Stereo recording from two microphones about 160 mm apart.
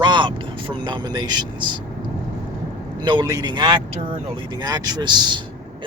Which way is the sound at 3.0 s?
25° right (ahead or behind).